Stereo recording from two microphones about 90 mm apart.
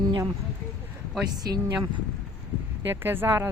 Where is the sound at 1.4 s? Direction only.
50° right (ahead or behind).